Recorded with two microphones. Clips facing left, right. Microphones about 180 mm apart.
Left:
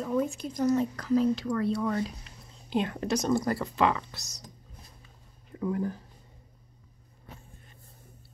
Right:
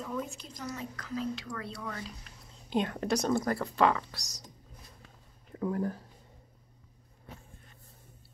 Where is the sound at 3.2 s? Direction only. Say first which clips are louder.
Left 4 dB; 5° left (ahead or behind).